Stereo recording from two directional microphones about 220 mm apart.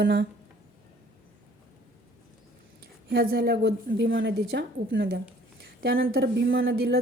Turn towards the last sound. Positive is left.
turn(degrees=-45)  # may be behind; listen again after turning